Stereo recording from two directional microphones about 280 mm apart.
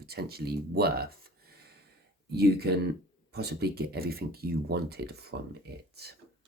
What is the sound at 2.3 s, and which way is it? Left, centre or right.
Speech, right.